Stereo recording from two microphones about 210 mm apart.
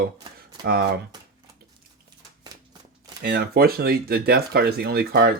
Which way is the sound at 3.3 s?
50° right (ahead or behind).